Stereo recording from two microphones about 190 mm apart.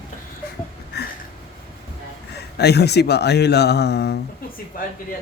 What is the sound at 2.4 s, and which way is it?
Speech, 60° left (ahead or behind).